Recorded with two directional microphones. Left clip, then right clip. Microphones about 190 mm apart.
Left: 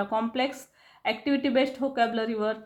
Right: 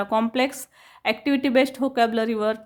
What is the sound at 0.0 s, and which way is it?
Speech, 45° right (ahead or behind).